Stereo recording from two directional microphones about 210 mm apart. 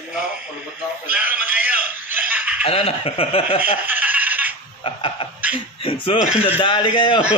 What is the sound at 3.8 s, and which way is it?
Giggle, 10° right (ahead or behind).